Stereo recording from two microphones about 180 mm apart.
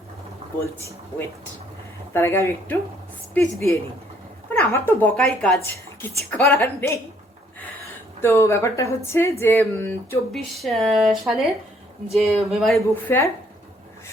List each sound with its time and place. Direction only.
0.6 s a woman's voice: 15° left (ahead or behind)
2.1 s a woman's voice: 15° left (ahead or behind)
8.2 s a woman's voice: 15° left (ahead or behind)
10.3 s speech: centre (ahead or behind)
13.1 s a woman's voice: 15° left (ahead or behind)